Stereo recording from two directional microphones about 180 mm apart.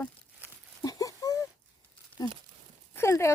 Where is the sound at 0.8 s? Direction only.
20° left (ahead or behind).